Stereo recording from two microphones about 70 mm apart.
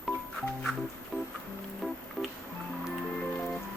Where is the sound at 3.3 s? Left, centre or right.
Centre.